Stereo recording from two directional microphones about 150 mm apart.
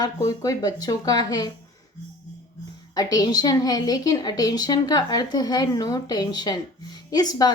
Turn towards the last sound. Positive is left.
turn(degrees=25)  # may be behind; listen again after turning